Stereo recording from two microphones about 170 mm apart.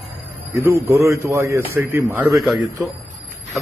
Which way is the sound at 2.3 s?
Centre (ahead or behind).